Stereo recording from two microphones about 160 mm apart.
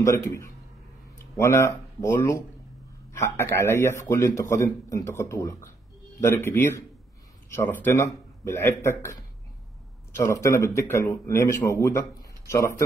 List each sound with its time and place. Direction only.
0.0 s a man's voice: 20° left (ahead or behind)